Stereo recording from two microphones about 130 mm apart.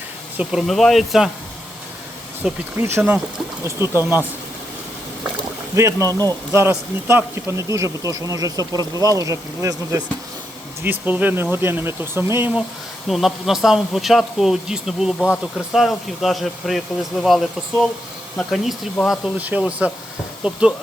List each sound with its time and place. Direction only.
0.3 s speech: 5° right (ahead or behind)
2.7 s speech: 20° right (ahead or behind)
5.7 s speech: 25° right (ahead or behind)
11.0 s speech: 15° right (ahead or behind)
13.1 s speech: centre (ahead or behind)